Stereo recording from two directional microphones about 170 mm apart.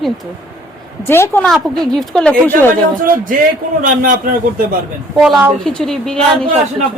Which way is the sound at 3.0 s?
55° right (ahead or behind).